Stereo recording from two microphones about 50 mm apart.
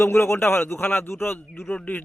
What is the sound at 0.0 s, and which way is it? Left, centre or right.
Speech, left.